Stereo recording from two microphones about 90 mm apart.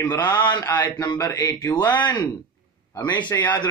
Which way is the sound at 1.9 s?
55° left (ahead or behind).